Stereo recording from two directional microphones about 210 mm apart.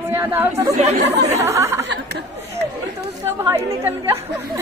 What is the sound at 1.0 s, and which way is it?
Speech, 55° right (ahead or behind).